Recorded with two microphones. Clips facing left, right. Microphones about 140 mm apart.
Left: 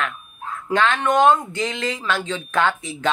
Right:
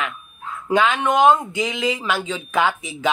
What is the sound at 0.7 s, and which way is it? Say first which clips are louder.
Speech: right 1 dB; 10° right (ahead or behind).